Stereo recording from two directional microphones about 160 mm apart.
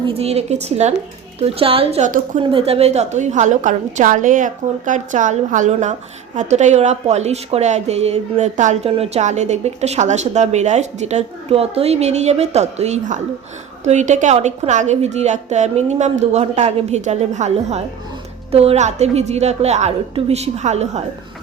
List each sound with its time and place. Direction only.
0.0 s speech: 40° right (ahead or behind)
2.0 s a woman's voice: 55° right (ahead or behind)
2.4 s a woman's voice: 35° right (ahead or behind)